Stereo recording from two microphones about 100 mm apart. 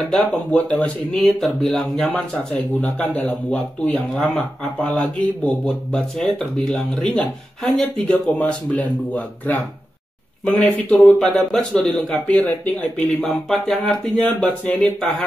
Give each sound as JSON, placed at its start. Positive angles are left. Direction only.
{"t": 0.1, "sound": "speech", "side_deg": 10}
{"t": 1.1, "sound": "a man's voice", "side_deg": 0}
{"t": 2.0, "sound": "speech", "side_deg": 15}
{"t": 4.7, "sound": "speech", "side_deg": 15}
{"t": 10.4, "sound": "a man's voice", "side_deg": 10}